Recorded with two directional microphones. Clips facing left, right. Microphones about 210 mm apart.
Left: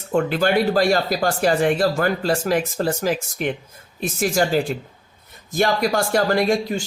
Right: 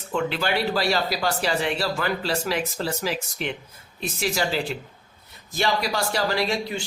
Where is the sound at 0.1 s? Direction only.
45° left (ahead or behind).